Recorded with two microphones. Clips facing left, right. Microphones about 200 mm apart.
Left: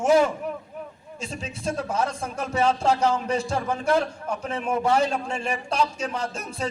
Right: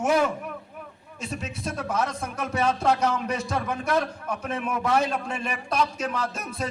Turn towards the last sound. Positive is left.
turn(degrees=30)  # may be behind; listen again after turning